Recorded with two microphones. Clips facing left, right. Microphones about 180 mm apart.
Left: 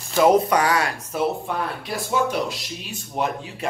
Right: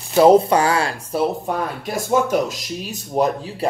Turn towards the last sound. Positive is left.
turn(degrees=-35)  # may be behind; listen again after turning